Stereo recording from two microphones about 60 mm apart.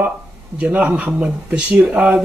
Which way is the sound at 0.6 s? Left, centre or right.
Right.